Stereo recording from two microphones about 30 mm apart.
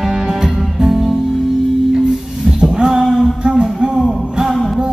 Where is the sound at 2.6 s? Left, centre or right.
Right.